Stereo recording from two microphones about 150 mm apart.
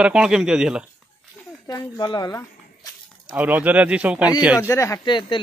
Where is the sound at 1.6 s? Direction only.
25° left (ahead or behind).